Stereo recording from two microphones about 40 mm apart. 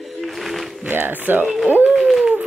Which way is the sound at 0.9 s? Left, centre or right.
Right.